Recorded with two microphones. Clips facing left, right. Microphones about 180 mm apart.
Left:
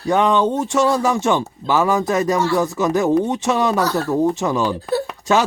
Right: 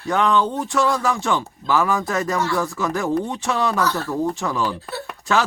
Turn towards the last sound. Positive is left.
turn(degrees=20)  # may be behind; listen again after turning